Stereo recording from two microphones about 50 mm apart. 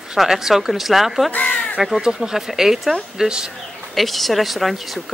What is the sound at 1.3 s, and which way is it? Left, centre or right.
Speech, left.